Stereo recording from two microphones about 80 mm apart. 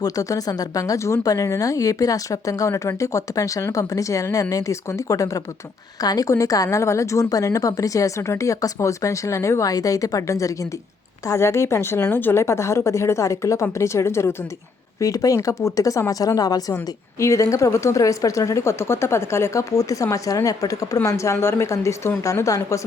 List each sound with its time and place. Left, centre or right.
0.0 s a woman's voice: left
15.0 s speech: left
16.7 s a woman's voice: left